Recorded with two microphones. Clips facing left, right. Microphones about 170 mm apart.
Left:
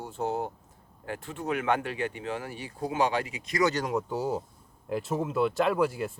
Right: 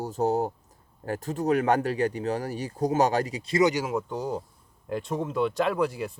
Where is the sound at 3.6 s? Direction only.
15° right (ahead or behind).